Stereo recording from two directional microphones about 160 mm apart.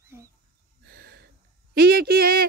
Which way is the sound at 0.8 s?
75° right (ahead or behind).